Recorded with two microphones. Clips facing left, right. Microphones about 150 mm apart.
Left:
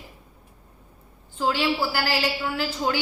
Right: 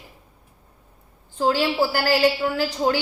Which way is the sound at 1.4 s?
40° right (ahead or behind).